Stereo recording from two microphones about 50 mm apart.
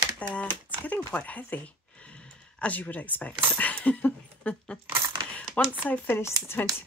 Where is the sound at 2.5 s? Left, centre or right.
Left.